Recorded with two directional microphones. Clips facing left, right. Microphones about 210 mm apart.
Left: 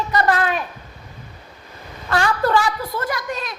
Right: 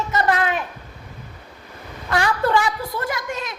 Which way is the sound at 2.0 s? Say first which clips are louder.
Left 1 dB; 15° right (ahead or behind).